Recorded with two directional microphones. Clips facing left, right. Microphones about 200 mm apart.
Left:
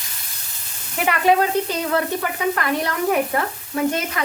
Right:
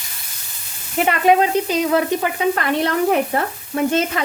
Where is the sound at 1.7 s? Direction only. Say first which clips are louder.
Right 4 dB; 15° right (ahead or behind).